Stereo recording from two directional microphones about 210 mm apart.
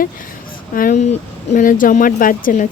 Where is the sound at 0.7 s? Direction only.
40° left (ahead or behind).